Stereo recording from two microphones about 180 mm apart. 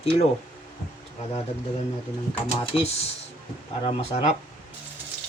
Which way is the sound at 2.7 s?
35° left (ahead or behind).